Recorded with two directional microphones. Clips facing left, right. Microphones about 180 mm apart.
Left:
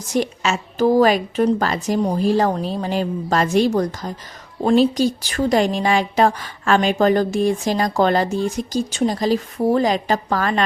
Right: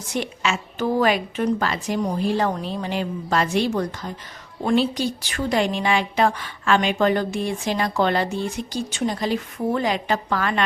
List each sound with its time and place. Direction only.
0.1 s a woman's voice: 40° left (ahead or behind)